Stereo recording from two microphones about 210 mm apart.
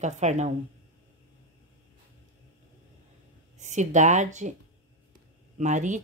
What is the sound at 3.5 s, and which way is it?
Speech, 35° right (ahead or behind).